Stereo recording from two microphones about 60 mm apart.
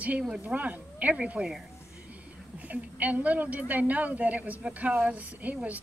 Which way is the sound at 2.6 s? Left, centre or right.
Right.